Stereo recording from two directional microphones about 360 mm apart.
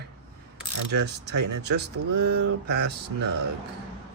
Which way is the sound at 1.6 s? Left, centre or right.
Right.